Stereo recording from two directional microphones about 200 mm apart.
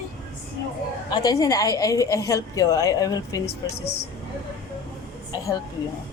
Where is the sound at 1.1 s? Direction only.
20° left (ahead or behind).